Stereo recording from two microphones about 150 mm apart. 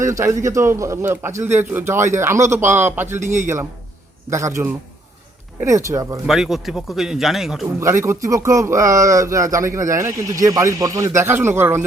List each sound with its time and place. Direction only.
0.0 s speech: 20° right (ahead or behind)
4.3 s speech: 20° right (ahead or behind)
6.2 s speech: centre (ahead or behind)
7.8 s speech: 20° right (ahead or behind)